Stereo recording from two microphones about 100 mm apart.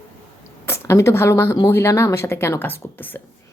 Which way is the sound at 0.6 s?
25° left (ahead or behind).